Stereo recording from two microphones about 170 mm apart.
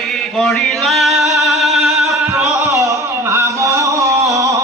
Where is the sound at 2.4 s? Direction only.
20° right (ahead or behind).